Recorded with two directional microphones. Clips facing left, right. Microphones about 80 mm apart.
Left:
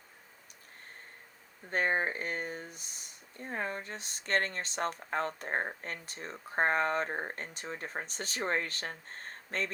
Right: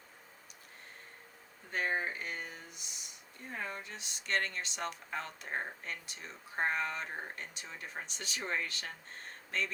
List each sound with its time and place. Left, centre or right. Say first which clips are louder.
1.7 s speech: left 4 dB; left